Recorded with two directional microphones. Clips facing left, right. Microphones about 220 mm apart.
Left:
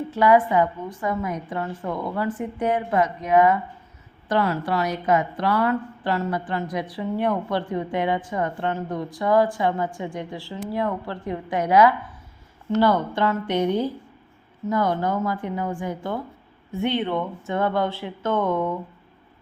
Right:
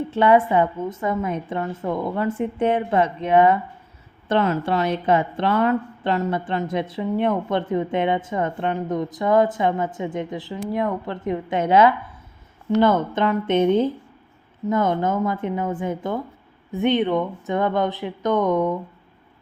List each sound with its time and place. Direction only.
0.1 s speech: 25° right (ahead or behind)